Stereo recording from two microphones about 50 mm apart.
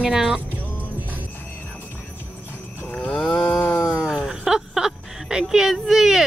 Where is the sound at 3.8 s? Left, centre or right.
Centre.